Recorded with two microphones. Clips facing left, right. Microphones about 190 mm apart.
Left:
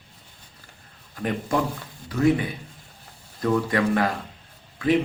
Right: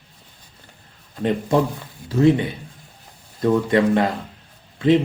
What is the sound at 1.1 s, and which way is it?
Speech, 25° right (ahead or behind).